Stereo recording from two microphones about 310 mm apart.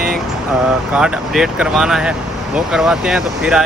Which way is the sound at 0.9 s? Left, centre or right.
Centre.